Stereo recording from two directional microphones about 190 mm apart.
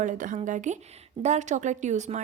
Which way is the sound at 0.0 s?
40° right (ahead or behind).